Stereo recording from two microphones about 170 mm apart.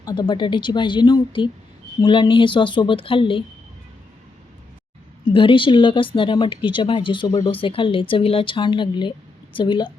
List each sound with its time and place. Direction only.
0.0 s speech: 25° left (ahead or behind)
5.2 s speech: 30° left (ahead or behind)